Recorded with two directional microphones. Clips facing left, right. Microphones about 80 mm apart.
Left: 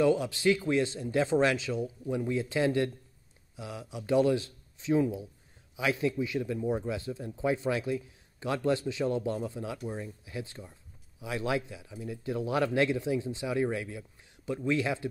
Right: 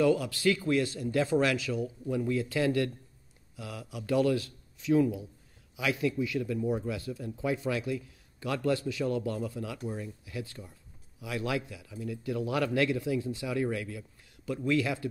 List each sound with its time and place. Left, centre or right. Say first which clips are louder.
0.0 s a man's voice: even; left